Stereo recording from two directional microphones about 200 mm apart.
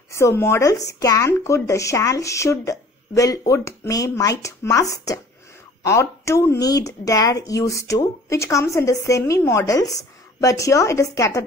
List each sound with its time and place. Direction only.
0.1 s speech: 15° left (ahead or behind)